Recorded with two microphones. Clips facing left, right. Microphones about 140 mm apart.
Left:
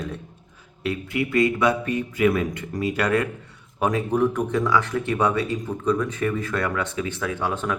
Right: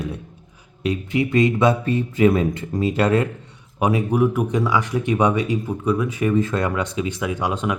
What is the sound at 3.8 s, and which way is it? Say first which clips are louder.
Speech: right 2 dB; 10° right (ahead or behind).